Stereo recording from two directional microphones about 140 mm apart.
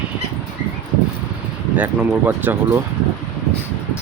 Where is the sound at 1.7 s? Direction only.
10° right (ahead or behind).